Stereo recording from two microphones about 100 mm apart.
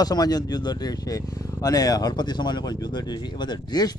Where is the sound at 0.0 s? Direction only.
40° left (ahead or behind).